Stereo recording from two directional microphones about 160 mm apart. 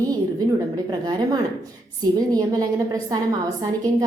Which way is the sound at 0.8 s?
25° right (ahead or behind).